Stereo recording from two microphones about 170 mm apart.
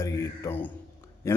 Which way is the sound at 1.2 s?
15° left (ahead or behind).